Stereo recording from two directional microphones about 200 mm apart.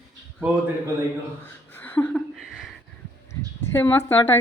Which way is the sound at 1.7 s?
10° left (ahead or behind).